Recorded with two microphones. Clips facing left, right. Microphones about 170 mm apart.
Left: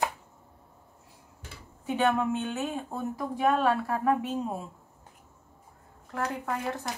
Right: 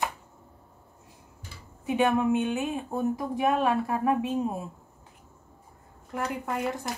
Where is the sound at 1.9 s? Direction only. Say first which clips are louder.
Right 2 dB; 15° right (ahead or behind).